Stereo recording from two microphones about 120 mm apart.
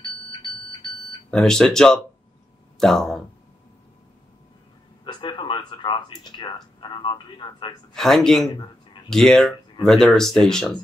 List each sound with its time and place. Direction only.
1.3 s speech: 5° left (ahead or behind)
5.0 s speech: 40° left (ahead or behind)
7.9 s speech: 5° left (ahead or behind)